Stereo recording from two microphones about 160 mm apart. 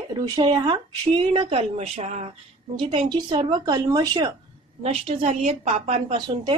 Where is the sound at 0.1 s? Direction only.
25° right (ahead or behind); by 2.3 s 40° right (ahead or behind).